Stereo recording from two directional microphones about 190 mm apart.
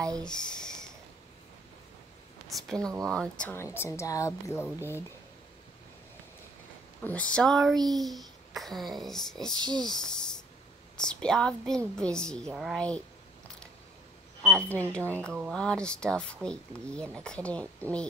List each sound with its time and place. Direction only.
0.2 s speech: 5° left (ahead or behind)
2.5 s a child's voice: centre (ahead or behind)
7.0 s a child's voice: 5° left (ahead or behind)
9.6 s speech: 20° right (ahead or behind)
9.8 s a sound: 5° left (ahead or behind)
11.0 s a child's voice: 5° left (ahead or behind)
14.4 s a woman's voice: 5° left (ahead or behind)